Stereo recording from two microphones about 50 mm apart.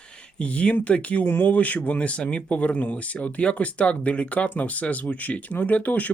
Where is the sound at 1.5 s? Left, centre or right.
Left.